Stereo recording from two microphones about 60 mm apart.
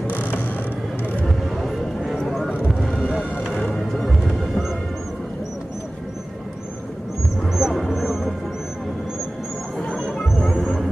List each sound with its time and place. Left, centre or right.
0.0 s a sound: left
1.2 s vehicle: centre
2.7 s a sound: centre
3.9 s music: centre
7.5 s music: centre
9.9 s music: centre